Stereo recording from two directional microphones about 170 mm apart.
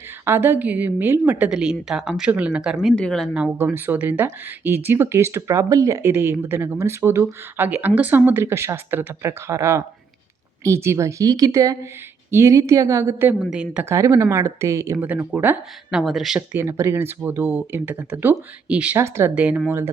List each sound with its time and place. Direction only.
0.3 s speech: 15° right (ahead or behind)
13.8 s speech: 20° right (ahead or behind)